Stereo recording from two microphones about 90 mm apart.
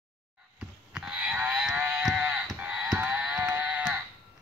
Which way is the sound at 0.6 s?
10° right (ahead or behind).